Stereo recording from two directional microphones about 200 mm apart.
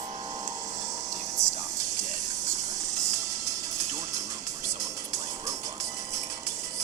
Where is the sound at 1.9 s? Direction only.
35° right (ahead or behind).